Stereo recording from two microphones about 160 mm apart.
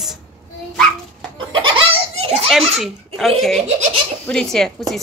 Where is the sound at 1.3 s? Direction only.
30° right (ahead or behind).